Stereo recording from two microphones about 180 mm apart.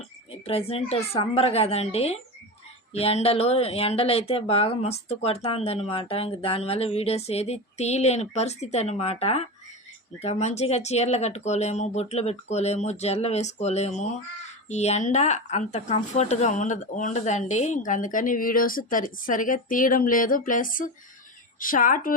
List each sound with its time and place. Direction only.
0.4 s a woman's voice: 35° left (ahead or behind); by 22.1 s 50° left (ahead or behind)